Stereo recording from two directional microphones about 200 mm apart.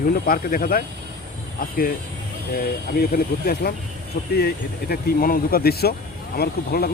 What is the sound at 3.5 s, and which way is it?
Speech, 50° left (ahead or behind).